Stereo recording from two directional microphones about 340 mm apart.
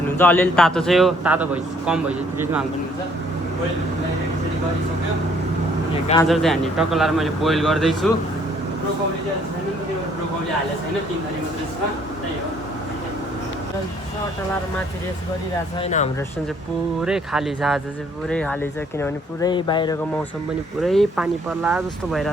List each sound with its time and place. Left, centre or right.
0.2 s speech: centre
6.2 s speech: centre
15.8 s speech: left
17.0 s speech: centre
20.8 s speech: centre